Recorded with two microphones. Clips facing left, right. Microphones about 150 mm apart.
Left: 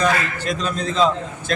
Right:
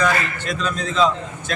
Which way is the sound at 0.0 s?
35° left (ahead or behind).